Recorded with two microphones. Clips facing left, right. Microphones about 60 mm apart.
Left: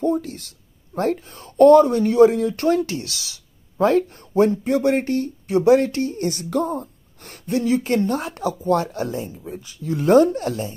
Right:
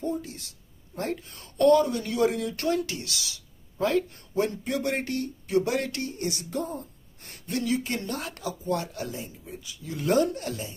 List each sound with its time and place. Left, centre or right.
0.0 s speech: left
1.3 s speech: left
4.4 s speech: left
6.1 s speech: left
7.4 s speech: left
8.6 s speech: left
8.9 s speech: left